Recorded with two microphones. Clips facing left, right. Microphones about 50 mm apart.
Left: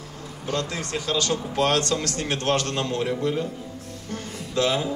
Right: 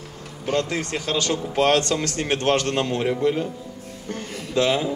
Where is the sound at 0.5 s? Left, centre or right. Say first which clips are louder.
Right 4 dB; right.